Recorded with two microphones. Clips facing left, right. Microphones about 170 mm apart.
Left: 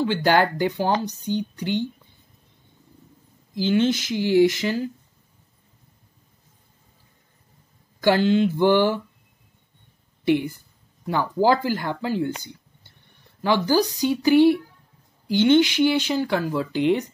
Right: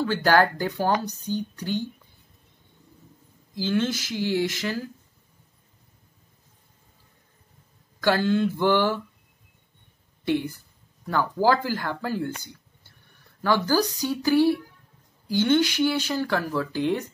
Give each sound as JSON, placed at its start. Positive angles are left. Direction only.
{"t": 0.0, "sound": "speech", "side_deg": 15}
{"t": 3.5, "sound": "speech", "side_deg": 20}
{"t": 8.0, "sound": "speech", "side_deg": 15}
{"t": 10.2, "sound": "speech", "side_deg": 15}